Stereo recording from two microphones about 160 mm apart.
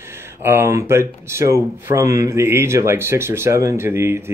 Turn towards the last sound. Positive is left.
turn(degrees=-15)  # may be behind; listen again after turning